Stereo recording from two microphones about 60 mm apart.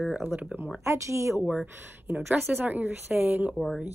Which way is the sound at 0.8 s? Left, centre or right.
Right.